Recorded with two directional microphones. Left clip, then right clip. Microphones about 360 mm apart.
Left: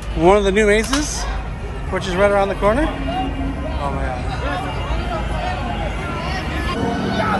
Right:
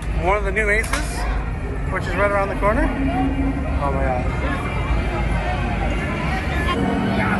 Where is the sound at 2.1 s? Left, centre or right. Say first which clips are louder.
Left 4 dB; centre.